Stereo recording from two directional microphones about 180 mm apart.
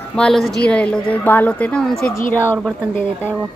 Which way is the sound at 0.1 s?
5° left (ahead or behind).